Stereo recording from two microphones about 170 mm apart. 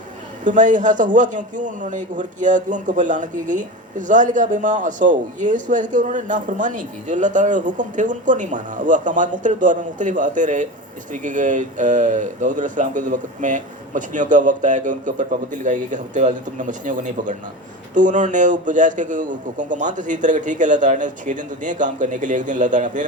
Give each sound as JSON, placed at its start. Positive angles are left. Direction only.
{"t": 0.4, "sound": "a man's voice", "side_deg": -50}